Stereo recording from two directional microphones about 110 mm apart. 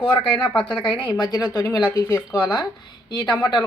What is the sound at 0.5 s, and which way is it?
Speech, 10° left (ahead or behind).